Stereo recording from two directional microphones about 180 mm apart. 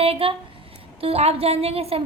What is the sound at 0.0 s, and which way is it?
A woman's voice, 30° right (ahead or behind).